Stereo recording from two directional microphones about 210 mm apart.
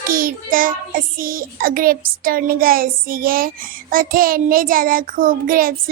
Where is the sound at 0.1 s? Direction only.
40° right (ahead or behind).